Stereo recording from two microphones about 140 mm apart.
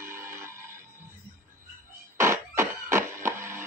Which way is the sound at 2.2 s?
20° right (ahead or behind).